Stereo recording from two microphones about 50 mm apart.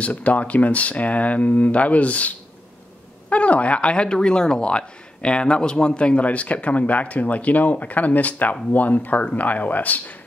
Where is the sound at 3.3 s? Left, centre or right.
Left.